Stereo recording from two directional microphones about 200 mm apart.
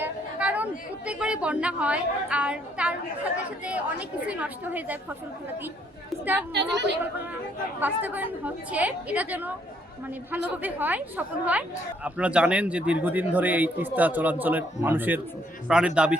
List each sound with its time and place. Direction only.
0.0 s a woman's voice: 5° right (ahead or behind)
6.1 s a sound: 10° right (ahead or behind)
6.5 s a woman's voice: 60° right (ahead or behind)
7.8 s a man's voice: 10° right (ahead or behind)